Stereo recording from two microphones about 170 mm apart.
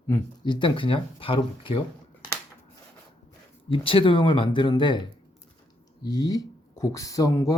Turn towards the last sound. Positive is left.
turn(degrees=20)  # may be behind; listen again after turning